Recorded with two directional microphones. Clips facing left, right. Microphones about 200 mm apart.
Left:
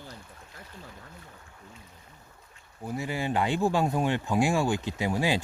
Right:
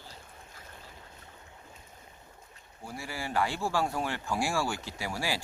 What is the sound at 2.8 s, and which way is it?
Speech, 20° left (ahead or behind).